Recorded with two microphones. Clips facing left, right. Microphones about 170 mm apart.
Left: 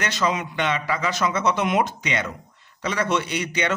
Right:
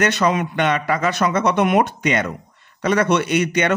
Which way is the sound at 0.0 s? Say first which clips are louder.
Right 6 dB; 55° right (ahead or behind).